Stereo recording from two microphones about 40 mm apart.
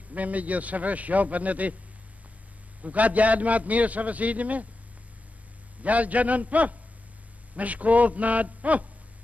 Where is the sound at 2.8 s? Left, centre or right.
Right.